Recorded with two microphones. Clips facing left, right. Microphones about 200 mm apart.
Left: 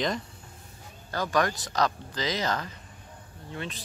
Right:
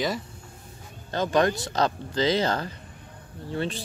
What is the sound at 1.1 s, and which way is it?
Speech, 25° right (ahead or behind).